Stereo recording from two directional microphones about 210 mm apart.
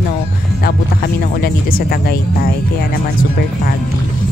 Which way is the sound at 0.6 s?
45° left (ahead or behind).